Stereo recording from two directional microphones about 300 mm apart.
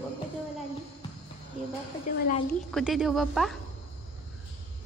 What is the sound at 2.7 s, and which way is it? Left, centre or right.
Speech, centre.